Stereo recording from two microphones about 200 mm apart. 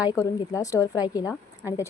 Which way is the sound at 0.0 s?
15° left (ahead or behind).